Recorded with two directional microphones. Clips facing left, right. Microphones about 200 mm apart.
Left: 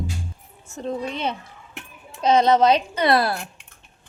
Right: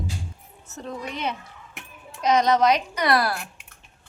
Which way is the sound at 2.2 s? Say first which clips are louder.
Left 3 dB; 30° left (ahead or behind).